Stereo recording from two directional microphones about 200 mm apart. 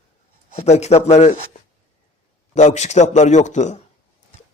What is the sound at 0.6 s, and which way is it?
Speech, 35° left (ahead or behind).